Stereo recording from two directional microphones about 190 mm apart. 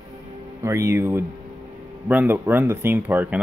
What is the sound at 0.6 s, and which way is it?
Speech, 15° right (ahead or behind).